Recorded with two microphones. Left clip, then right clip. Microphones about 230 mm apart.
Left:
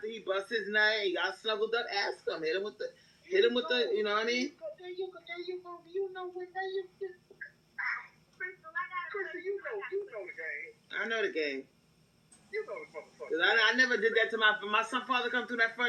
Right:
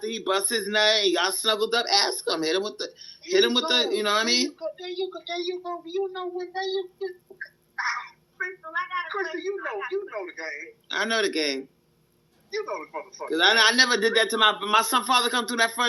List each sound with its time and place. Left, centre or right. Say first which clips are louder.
0.0 s a woman's voice: right 8 dB; right